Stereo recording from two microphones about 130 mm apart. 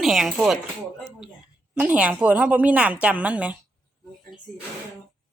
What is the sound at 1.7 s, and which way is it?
A woman's voice, 10° right (ahead or behind).